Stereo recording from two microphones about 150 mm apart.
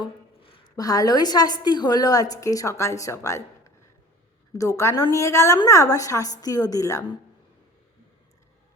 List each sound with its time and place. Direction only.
0.0 s a sound: 35° left (ahead or behind)
0.8 s a woman's voice: 25° left (ahead or behind)
4.5 s a woman's voice: 20° left (ahead or behind)